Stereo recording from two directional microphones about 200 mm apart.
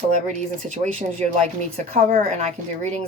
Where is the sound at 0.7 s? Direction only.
35° right (ahead or behind).